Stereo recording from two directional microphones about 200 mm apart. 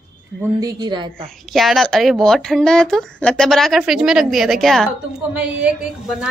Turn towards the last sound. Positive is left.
turn(degrees=-5)  # may be behind; listen again after turning